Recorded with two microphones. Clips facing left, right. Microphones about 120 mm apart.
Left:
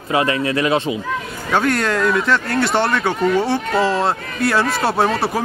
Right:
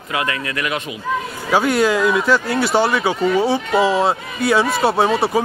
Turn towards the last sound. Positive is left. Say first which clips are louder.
# right 2 dB
turn(degrees=0)  # may be behind; listen again after turning